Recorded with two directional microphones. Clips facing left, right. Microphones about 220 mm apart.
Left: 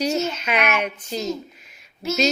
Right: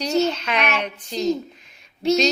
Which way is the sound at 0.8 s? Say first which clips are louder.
Right 1 dB; 5° left (ahead or behind).